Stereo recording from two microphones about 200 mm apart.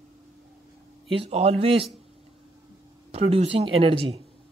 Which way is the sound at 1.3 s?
30° right (ahead or behind).